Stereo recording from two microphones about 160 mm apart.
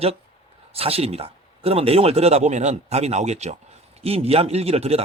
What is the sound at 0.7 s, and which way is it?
Speech, 40° right (ahead or behind).